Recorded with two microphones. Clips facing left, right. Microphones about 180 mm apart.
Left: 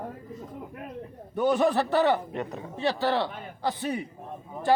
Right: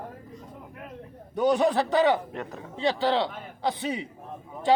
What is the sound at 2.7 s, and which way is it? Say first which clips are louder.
A man's voice: right 1 dB; 15° right (ahead or behind).